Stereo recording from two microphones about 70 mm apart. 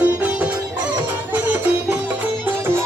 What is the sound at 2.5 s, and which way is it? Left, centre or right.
Music, right.